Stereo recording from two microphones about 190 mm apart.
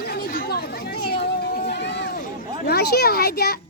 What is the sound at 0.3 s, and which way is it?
Chatter, 55° left (ahead or behind).